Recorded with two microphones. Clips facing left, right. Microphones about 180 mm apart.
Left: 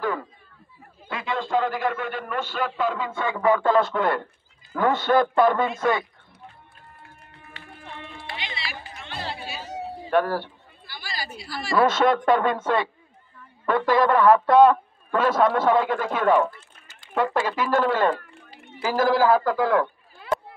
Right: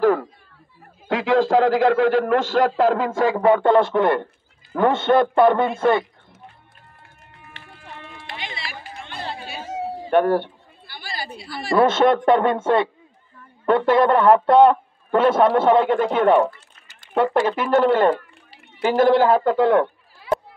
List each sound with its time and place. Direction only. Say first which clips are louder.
1.0 s a man's voice: right 11 dB; 90° right
3.1 s a man's voice: right 5 dB; 35° right (ahead or behind)
8.4 s music: right 3 dB; 50° right (ahead or behind)
9.0 s chatter: right 1 dB; 55° right (ahead or behind)
10.0 s speech: right 5 dB; 25° right (ahead or behind)
11.3 s a woman's voice: right 2 dB; 55° right (ahead or behind)
11.7 s a man's voice: right 4 dB; 25° right (ahead or behind)
20.2 s a sound: right 4 dB; 55° left (ahead or behind)